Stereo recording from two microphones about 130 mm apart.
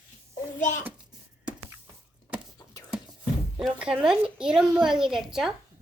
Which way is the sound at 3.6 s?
5° right (ahead or behind).